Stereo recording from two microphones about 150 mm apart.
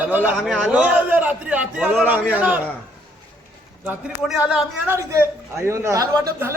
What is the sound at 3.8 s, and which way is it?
A man's voice, 10° right (ahead or behind).